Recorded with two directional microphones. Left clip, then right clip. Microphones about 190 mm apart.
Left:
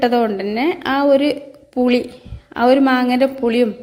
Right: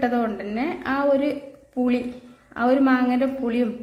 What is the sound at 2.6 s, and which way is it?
Speech, 35° left (ahead or behind).